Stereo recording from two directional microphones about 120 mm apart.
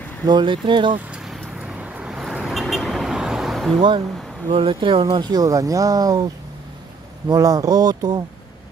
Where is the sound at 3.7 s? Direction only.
45° right (ahead or behind).